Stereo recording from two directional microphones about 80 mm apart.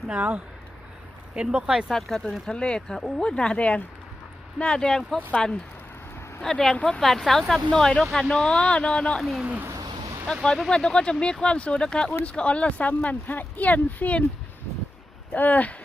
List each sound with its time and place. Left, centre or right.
0.1 s speech: centre
1.9 s speech: centre
7.0 s speech: centre
9.4 s speech: centre
10.3 s speech: centre
15.3 s speech: left